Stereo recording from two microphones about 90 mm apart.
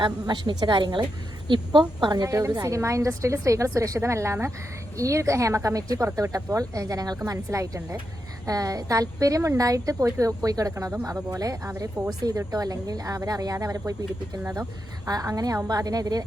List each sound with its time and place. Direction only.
0.0 s a woman's voice: 55° right (ahead or behind)
2.2 s a woman's voice: 35° right (ahead or behind)
15.0 s speech: 45° right (ahead or behind)